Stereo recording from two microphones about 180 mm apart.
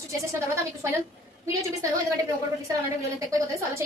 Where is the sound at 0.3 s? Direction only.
15° right (ahead or behind).